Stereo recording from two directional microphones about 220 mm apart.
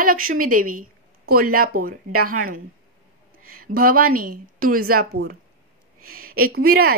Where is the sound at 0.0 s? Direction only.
40° right (ahead or behind).